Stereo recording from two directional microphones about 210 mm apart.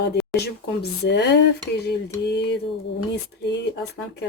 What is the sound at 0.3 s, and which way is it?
Speech, 50° left (ahead or behind).